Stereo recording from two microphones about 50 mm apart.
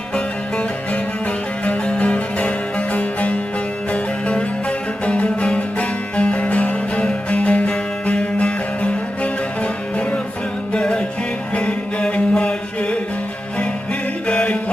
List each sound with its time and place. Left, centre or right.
1.6 s music: left
10.8 s music: centre
14.3 s music: centre